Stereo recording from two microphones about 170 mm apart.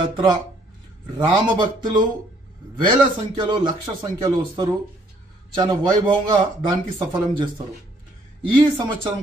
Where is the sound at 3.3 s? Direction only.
25° right (ahead or behind).